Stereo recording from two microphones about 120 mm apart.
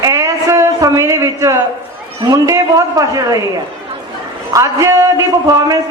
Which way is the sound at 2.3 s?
25° right (ahead or behind).